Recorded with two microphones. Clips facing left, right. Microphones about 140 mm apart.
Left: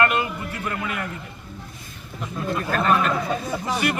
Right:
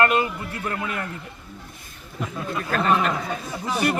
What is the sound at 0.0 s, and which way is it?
Speech, 35° right (ahead or behind).